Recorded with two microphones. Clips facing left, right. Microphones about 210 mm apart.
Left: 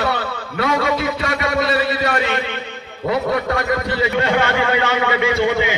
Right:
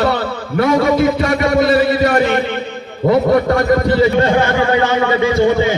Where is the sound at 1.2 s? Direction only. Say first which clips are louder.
Right 7 dB; 45° right (ahead or behind).